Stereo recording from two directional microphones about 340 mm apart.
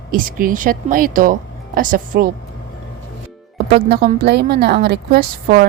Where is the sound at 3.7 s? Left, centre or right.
Right.